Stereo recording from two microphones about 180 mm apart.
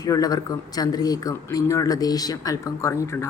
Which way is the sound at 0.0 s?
20° left (ahead or behind).